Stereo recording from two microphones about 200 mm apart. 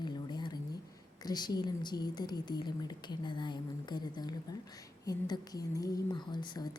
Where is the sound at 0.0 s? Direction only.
20° left (ahead or behind).